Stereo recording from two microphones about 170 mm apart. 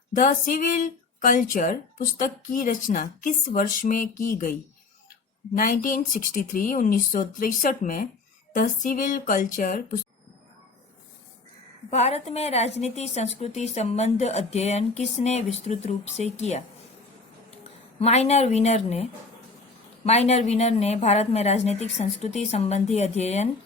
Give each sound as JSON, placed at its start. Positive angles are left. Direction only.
{"t": 0.1, "sound": "speech", "side_deg": 50}
{"t": 5.5, "sound": "speech", "side_deg": 50}
{"t": 11.9, "sound": "a woman's voice", "side_deg": 40}
{"t": 20.1, "sound": "a woman's voice", "side_deg": 40}